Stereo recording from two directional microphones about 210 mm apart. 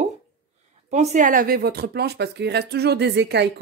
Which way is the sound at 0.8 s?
35° right (ahead or behind).